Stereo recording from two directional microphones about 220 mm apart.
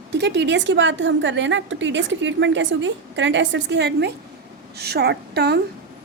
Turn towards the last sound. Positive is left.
turn(degrees=-50)  # may be behind; listen again after turning